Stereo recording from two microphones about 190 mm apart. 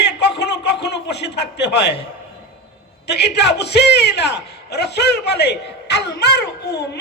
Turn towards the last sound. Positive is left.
turn(degrees=60)  # may be behind; listen again after turning